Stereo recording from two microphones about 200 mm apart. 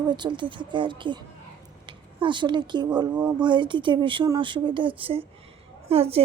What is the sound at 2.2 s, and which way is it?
A woman's voice, 25° right (ahead or behind).